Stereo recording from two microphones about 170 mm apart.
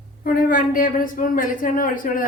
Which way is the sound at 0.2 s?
55° left (ahead or behind).